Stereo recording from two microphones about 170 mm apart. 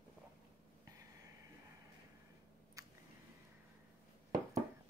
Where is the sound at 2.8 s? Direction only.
20° right (ahead or behind).